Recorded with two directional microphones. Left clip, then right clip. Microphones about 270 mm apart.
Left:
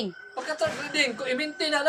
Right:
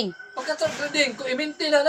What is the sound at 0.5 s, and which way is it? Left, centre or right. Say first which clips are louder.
A woman's voice: right 2 dB; centre.